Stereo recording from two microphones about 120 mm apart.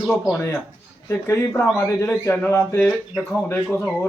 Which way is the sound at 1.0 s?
20° left (ahead or behind).